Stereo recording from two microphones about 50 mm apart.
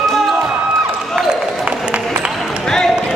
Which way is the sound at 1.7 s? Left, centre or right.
Right.